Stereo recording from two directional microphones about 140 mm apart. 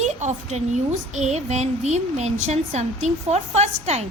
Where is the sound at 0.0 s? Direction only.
55° right (ahead or behind).